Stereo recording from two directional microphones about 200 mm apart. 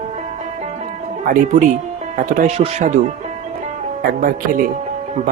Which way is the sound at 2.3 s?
40° right (ahead or behind).